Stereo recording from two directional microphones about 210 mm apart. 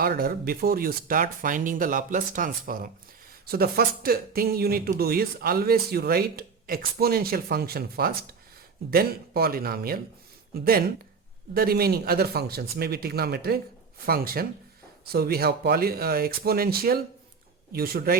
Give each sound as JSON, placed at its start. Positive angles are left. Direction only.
{"t": 0.0, "sound": "speech", "side_deg": -45}